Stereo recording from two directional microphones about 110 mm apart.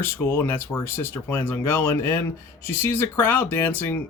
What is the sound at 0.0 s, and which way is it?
Speech, 20° left (ahead or behind).